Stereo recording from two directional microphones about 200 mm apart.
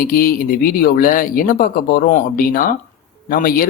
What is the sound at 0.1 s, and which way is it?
Speech, 45° left (ahead or behind).